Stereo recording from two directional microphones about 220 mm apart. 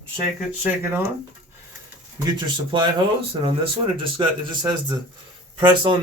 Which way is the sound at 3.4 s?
25° right (ahead or behind).